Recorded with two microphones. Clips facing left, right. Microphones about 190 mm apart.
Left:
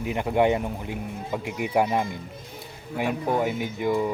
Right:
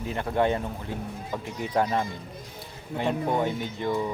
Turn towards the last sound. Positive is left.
turn(degrees=10)  # may be behind; listen again after turning